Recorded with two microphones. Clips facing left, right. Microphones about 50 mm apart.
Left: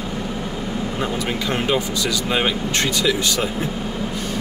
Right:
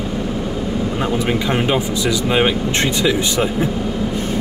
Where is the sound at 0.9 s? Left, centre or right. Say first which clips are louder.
Right 5 dB; centre.